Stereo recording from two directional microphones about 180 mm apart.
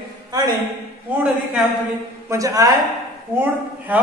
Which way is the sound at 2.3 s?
20° right (ahead or behind).